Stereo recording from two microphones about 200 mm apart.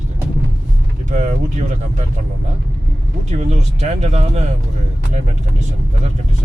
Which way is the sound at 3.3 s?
35° right (ahead or behind).